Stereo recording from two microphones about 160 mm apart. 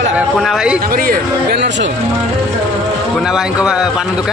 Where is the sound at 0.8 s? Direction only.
65° right (ahead or behind); by 1.9 s 90° right.